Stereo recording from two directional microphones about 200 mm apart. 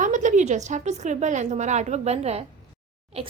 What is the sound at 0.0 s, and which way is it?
A woman's voice, 40° right (ahead or behind).